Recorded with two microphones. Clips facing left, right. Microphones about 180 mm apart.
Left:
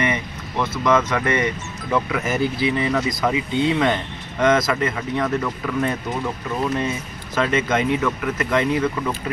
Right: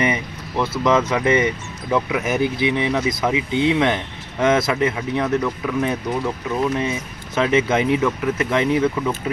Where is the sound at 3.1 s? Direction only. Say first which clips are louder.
Right 1 dB; 5° right (ahead or behind).